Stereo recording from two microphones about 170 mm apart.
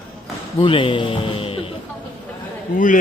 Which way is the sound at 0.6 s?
30° left (ahead or behind).